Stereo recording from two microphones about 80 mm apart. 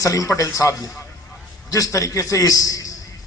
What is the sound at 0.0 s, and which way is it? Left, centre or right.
A man's voice, left.